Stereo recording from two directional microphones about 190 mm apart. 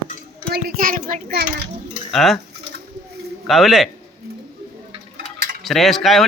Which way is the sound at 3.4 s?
Centre (ahead or behind).